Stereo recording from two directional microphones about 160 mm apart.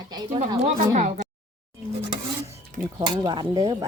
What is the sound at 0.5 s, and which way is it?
Speech, 45° right (ahead or behind).